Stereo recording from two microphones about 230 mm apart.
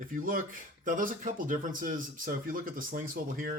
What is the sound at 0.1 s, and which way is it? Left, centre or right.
Speech, right.